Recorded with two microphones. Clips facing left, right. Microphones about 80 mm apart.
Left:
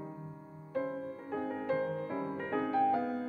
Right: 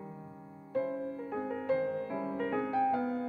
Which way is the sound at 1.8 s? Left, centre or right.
Left.